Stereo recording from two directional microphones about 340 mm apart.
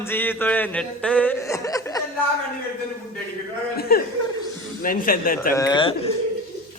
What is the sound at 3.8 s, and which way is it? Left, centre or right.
Chuckle, left.